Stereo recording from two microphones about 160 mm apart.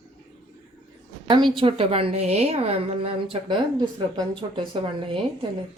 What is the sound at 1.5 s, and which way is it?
A woman's voice, 35° right (ahead or behind).